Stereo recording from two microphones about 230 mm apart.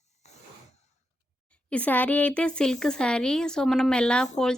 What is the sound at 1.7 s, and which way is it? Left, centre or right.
A woman's voice, centre.